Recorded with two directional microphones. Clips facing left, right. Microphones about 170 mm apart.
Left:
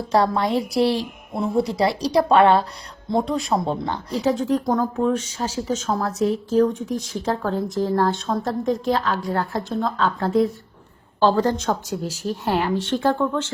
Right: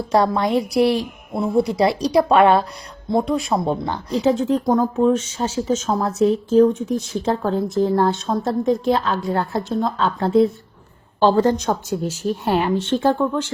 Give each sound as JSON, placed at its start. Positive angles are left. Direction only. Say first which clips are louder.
{"t": 0.1, "sound": "a woman's voice", "louder": "right 2 dB", "side_deg": -15}
{"t": 4.1, "sound": "a woman's voice", "louder": "right 3 dB", "side_deg": -20}